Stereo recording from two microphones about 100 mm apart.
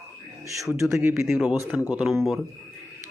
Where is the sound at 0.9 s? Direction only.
25° right (ahead or behind).